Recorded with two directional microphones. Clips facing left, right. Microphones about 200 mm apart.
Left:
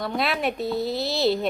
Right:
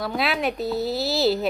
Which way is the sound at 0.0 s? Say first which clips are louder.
Right 1 dB; centre (ahead or behind).